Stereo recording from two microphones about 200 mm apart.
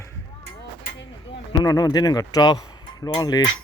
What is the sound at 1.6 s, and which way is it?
Speech, 20° left (ahead or behind).